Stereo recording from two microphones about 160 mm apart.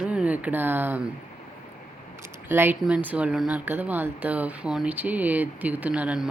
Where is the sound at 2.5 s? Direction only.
15° right (ahead or behind).